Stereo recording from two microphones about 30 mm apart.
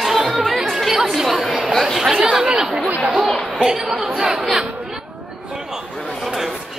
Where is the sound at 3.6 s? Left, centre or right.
Centre.